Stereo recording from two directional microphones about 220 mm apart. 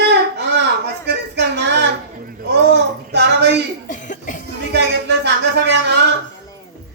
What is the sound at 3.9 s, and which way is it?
Cough, 35° left (ahead or behind).